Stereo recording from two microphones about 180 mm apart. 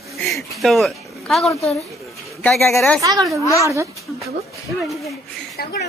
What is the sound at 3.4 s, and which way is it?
Speech, 15° left (ahead or behind).